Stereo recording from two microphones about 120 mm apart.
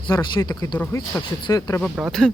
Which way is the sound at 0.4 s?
35° left (ahead or behind).